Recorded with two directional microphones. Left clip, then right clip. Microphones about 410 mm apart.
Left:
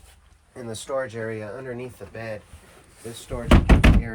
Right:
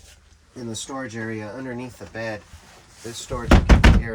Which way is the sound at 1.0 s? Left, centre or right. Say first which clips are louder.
Even; centre.